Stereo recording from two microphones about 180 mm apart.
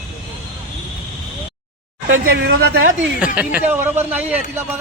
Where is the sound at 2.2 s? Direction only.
60° right (ahead or behind).